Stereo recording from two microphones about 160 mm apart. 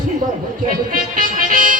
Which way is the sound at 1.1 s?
60° right (ahead or behind).